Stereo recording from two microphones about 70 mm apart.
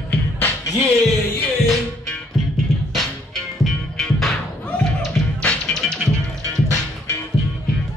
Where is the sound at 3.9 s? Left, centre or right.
Centre.